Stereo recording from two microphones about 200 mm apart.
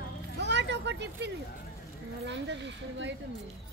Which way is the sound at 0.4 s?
60° right (ahead or behind).